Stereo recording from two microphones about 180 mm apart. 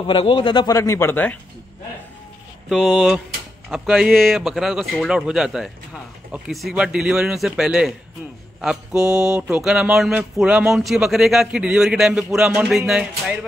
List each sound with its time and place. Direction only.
0.0 s speech: 30° left (ahead or behind); by 1.4 s 10° left (ahead or behind)
2.7 s speech: centre (ahead or behind)